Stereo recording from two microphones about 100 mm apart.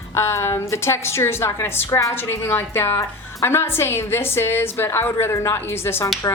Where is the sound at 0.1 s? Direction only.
25° left (ahead or behind).